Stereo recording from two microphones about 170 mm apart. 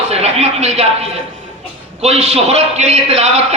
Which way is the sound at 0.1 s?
40° right (ahead or behind).